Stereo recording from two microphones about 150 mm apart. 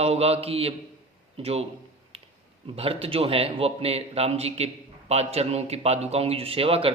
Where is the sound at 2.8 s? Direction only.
40° right (ahead or behind).